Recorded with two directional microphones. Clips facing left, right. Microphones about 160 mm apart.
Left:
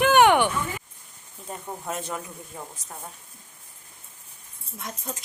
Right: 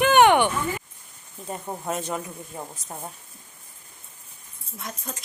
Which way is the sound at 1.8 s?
10° right (ahead or behind).